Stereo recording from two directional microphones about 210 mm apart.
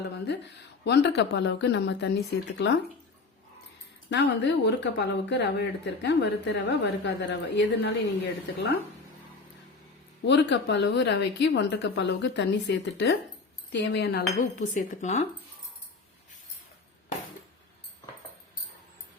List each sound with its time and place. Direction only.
0.9 s speech: 55° left (ahead or behind)
4.1 s speech: 55° left (ahead or behind)
10.2 s speech: 55° left (ahead or behind)
13.7 s cutlery: 55° left (ahead or behind); by 15.3 s 35° left (ahead or behind)